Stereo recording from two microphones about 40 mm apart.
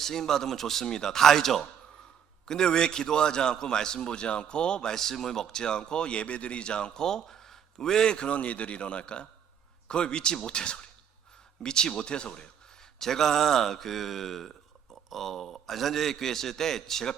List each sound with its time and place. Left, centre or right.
0.0 s a man's voice: centre
13.0 s a man's voice: centre